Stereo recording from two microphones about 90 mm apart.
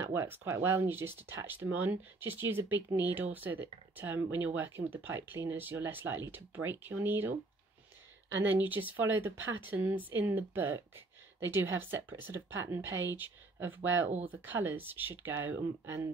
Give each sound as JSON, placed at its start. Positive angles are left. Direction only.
{"t": 0.1, "sound": "speech", "side_deg": -30}
{"t": 8.5, "sound": "speech", "side_deg": -20}